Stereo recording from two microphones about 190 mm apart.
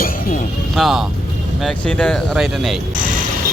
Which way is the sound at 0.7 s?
Centre (ahead or behind).